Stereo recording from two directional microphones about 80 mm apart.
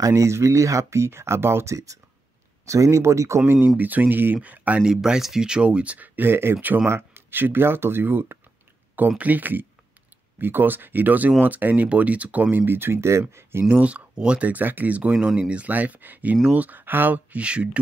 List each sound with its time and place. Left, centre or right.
0.0 s speech: right
3.6 s speech: right
13.7 s speech: centre